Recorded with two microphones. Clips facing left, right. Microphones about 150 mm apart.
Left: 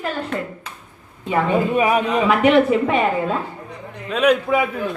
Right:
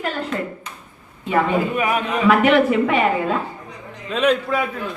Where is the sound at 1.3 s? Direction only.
30° left (ahead or behind).